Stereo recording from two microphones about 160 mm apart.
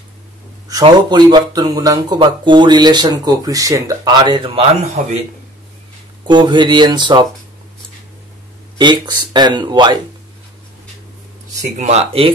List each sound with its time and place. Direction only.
0.7 s speech: 25° right (ahead or behind)
5.0 s a man's voice: 50° right (ahead or behind)
6.2 s speech: 25° right (ahead or behind)
8.7 s speech: 30° right (ahead or behind)
11.8 s speech: 40° right (ahead or behind)